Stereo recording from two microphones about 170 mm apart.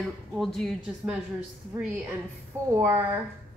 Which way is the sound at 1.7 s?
15° right (ahead or behind).